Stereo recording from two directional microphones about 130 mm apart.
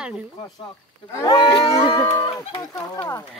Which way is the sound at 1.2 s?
35° left (ahead or behind).